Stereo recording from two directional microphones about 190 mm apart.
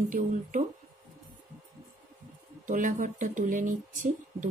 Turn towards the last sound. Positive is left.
turn(degrees=-40)  # may be behind; listen again after turning